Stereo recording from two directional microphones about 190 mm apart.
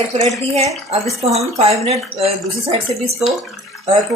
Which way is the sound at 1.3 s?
35° right (ahead or behind).